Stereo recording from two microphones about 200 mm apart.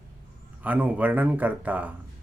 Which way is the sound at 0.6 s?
10° right (ahead or behind).